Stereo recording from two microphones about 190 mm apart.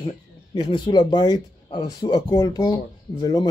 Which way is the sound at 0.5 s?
25° left (ahead or behind).